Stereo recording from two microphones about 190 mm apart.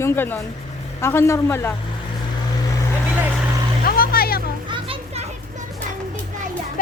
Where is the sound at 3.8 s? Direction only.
50° left (ahead or behind).